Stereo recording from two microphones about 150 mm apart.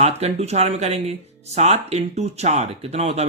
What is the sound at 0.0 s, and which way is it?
Speech, 45° right (ahead or behind).